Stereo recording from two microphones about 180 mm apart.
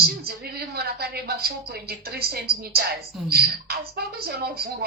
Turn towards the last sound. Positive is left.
turn(degrees=-60)  # may be behind; listen again after turning